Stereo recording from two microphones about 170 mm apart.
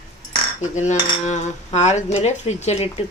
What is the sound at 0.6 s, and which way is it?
Cutlery, 45° left (ahead or behind).